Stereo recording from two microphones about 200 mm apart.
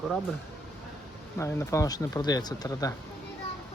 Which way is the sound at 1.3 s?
15° left (ahead or behind).